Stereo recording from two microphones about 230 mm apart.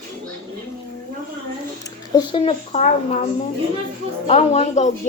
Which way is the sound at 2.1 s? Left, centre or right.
Left.